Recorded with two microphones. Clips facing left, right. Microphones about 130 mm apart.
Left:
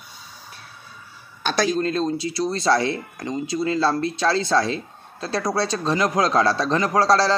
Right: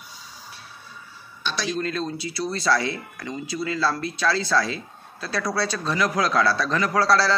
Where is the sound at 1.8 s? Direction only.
30° left (ahead or behind).